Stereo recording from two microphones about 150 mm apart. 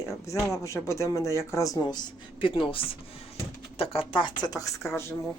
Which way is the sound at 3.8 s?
35° left (ahead or behind).